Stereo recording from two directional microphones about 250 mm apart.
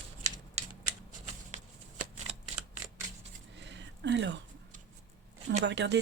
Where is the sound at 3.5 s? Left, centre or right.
Right.